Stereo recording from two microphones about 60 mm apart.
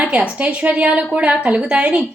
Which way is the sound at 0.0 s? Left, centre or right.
Right.